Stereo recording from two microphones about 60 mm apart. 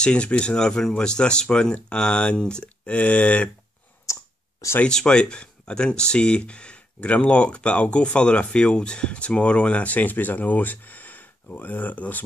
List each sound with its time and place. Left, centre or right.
0.0 s speech: centre
4.0 s a sound: left
4.8 s speech: centre